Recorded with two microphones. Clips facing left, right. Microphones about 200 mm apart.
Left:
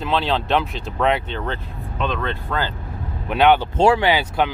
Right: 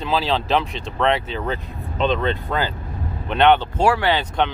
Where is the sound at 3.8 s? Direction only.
20° left (ahead or behind).